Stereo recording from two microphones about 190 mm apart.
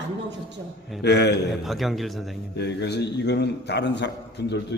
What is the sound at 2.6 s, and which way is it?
A man's voice, 60° left (ahead or behind).